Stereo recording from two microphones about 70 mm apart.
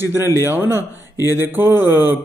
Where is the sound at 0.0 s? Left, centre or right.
Right.